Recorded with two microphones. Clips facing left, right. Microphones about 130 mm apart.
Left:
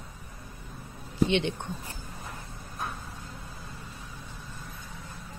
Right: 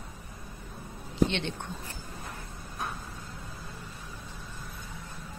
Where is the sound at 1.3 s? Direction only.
15° left (ahead or behind).